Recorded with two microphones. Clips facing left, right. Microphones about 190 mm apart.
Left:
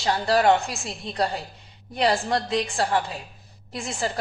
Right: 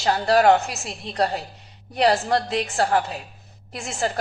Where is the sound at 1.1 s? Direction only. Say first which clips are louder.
Right 3 dB; 35° right (ahead or behind).